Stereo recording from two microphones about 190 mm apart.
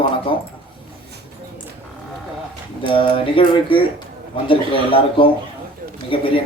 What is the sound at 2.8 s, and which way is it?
Speech, 30° left (ahead or behind).